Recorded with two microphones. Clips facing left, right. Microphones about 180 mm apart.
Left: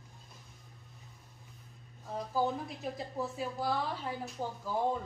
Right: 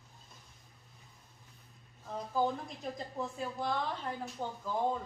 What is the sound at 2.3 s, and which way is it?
A woman's voice, 5° left (ahead or behind).